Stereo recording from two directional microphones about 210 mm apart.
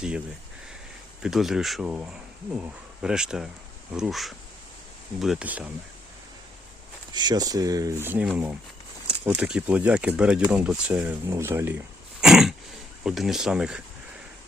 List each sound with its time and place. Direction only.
1.2 s speech: centre (ahead or behind)
7.1 s speech: 20° right (ahead or behind)
12.2 s throat clearing: centre (ahead or behind)
13.1 s speech: centre (ahead or behind)